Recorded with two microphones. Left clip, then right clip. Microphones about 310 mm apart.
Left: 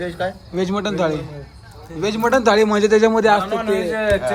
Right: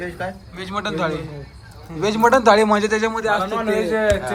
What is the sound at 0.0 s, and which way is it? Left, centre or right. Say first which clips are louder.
A man's voice: left 4 dB; left.